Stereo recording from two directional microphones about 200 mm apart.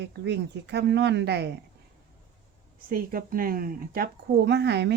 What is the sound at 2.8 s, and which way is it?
Speech, 45° right (ahead or behind).